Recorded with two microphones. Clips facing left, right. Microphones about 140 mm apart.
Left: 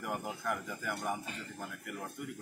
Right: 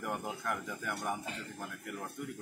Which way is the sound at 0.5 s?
5° left (ahead or behind).